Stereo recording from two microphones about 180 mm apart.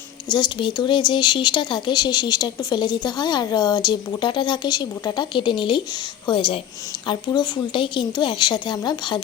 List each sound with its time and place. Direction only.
0.3 s speech: 25° left (ahead or behind)